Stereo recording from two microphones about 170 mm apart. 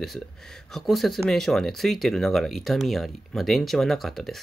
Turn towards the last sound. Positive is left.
turn(degrees=0)  # may be behind; listen again after turning